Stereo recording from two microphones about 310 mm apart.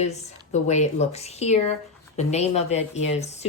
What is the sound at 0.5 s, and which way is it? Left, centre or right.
Speech, left.